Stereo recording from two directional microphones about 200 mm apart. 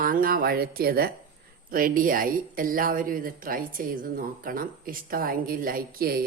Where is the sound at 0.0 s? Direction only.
45° right (ahead or behind).